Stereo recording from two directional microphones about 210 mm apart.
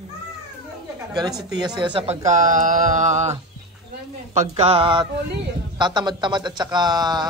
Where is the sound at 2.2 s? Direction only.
35° right (ahead or behind).